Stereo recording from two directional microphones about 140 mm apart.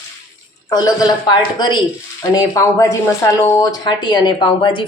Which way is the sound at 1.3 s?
30° left (ahead or behind).